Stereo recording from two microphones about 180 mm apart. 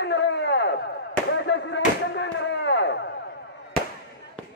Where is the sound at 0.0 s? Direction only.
75° left (ahead or behind).